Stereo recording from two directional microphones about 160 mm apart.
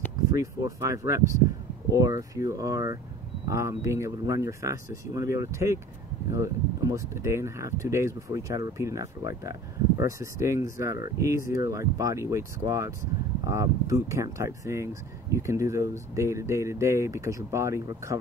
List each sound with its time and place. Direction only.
0.3 s speech: 20° right (ahead or behind)